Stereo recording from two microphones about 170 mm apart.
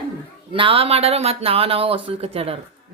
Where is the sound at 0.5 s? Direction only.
30° right (ahead or behind).